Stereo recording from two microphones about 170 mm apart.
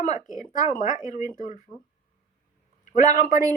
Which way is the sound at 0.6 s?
50° left (ahead or behind).